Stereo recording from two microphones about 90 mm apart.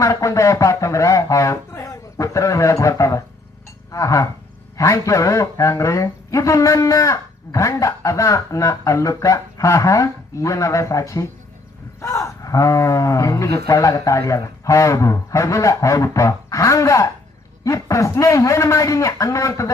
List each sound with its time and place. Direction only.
0.0 s speech: 35° left (ahead or behind)